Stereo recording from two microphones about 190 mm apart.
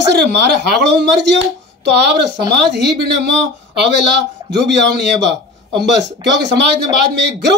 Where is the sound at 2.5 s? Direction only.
65° right (ahead or behind).